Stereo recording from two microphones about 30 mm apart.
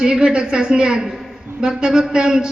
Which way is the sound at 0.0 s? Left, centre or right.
Right.